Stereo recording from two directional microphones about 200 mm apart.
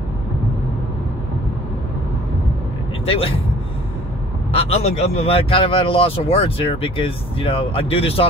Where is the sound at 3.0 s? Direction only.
30° left (ahead or behind).